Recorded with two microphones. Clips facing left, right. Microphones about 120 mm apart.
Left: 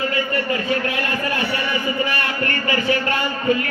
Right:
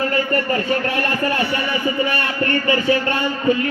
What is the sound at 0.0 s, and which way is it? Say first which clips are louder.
A man's voice: right 3 dB; 40° right (ahead or behind).